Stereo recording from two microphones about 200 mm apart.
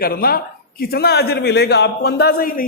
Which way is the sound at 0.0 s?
50° left (ahead or behind).